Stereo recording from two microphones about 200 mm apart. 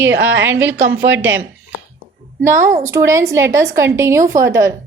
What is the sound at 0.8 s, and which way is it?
Speech, 70° right (ahead or behind).